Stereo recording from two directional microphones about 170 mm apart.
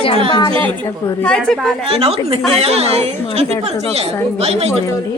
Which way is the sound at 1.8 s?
35° right (ahead or behind).